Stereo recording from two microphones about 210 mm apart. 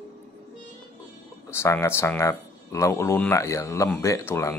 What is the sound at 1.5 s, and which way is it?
Speech, 10° left (ahead or behind).